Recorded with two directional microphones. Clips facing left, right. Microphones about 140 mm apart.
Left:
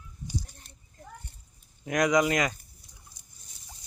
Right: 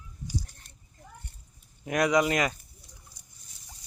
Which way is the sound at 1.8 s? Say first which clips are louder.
Even; 30° right (ahead or behind).